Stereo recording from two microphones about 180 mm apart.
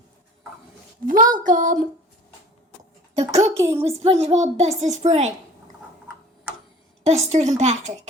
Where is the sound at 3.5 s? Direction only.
15° right (ahead or behind).